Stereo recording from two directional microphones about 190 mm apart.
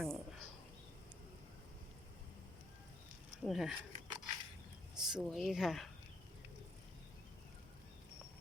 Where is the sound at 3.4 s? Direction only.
Centre (ahead or behind).